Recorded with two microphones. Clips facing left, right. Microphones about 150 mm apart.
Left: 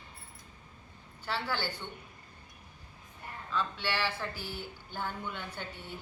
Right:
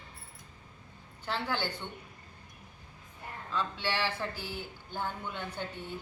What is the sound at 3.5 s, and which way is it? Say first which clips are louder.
Speech: even; 15° right (ahead or behind).